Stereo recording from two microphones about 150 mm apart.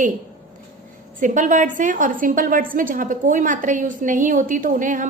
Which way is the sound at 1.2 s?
60° right (ahead or behind).